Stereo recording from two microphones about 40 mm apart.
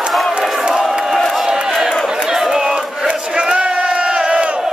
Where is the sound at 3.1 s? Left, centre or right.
Right.